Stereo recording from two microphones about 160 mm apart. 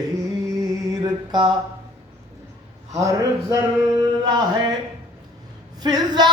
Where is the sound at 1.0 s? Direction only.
30° right (ahead or behind).